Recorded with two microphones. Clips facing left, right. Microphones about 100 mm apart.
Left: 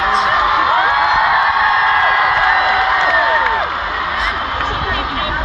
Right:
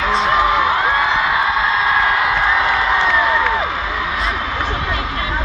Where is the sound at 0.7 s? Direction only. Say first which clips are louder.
Left 3 dB; 65° left (ahead or behind).